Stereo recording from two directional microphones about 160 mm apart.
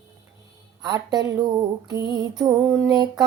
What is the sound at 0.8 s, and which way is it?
Music, 25° right (ahead or behind).